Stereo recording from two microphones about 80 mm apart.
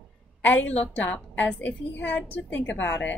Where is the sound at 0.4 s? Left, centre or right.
Left.